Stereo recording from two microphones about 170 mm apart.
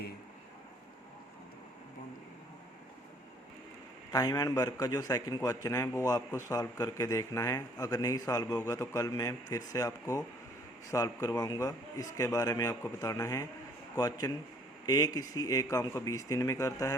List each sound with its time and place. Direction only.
4.1 s a man's voice: 25° left (ahead or behind)